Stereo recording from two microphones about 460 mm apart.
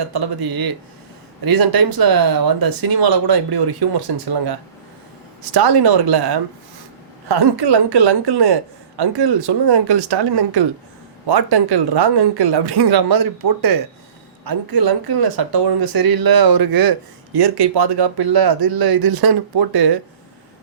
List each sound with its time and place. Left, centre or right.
0.1 s speech: right
5.5 s speech: right